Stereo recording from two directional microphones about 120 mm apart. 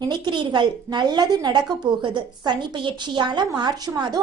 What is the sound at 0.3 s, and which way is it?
A woman's voice, 40° right (ahead or behind).